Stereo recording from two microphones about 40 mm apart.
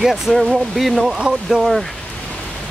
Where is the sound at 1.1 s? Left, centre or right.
Right.